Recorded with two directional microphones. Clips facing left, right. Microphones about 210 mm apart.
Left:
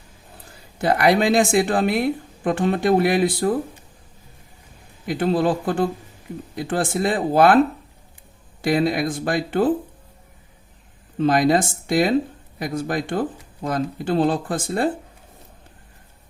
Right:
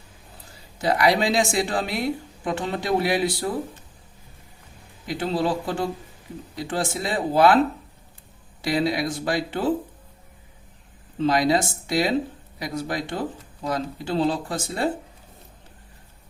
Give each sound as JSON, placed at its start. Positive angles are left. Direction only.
{"t": 0.8, "sound": "speech", "side_deg": 55}
{"t": 5.0, "sound": "speech", "side_deg": 55}
{"t": 8.6, "sound": "speech", "side_deg": 50}
{"t": 11.2, "sound": "speech", "side_deg": 50}